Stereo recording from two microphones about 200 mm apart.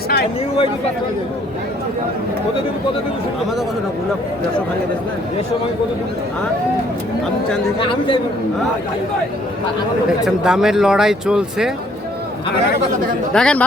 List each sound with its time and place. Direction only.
7.8 s a man's voice: 25° left (ahead or behind)
10.1 s speech: 5° right (ahead or behind)
13.3 s speech: 5° left (ahead or behind)